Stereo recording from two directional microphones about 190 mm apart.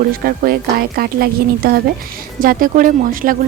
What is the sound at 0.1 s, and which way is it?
Speech, 50° right (ahead or behind).